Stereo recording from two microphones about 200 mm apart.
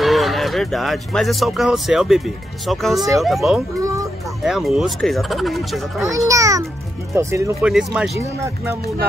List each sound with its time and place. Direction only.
0.0 s speech: centre (ahead or behind)
3.8 s a sound: 15° right (ahead or behind)
4.5 s speech: centre (ahead or behind)
6.0 s a child's voice: 15° right (ahead or behind)
7.7 s speech: 5° right (ahead or behind)